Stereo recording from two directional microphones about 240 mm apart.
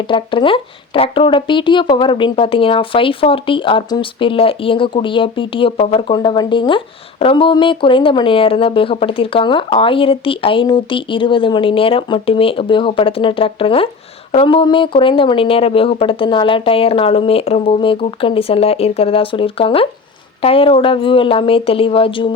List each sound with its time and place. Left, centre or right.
0.1 s speech: left